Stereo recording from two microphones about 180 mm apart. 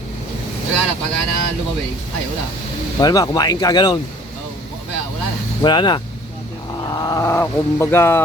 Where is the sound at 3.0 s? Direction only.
20° left (ahead or behind).